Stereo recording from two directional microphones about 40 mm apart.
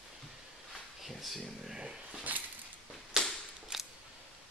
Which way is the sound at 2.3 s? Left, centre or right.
Right.